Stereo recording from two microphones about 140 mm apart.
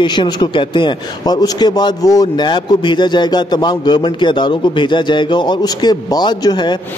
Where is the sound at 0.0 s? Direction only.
35° left (ahead or behind).